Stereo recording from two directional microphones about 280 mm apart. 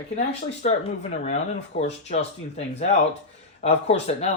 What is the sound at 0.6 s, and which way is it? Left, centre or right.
Speech, left.